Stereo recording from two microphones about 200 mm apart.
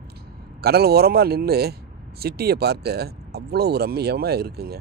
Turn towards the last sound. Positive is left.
turn(degrees=-50)  # may be behind; listen again after turning